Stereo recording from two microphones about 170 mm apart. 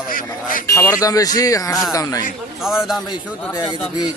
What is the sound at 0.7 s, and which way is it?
Speech, 20° left (ahead or behind).